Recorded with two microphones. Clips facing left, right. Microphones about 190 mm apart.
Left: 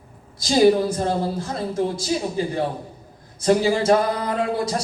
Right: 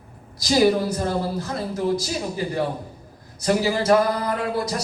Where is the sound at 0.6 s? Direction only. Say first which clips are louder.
Left 5 dB; 25° left (ahead or behind).